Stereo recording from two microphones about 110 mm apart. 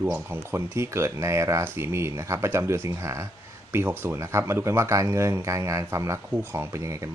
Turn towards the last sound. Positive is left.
turn(degrees=-25)  # may be behind; listen again after turning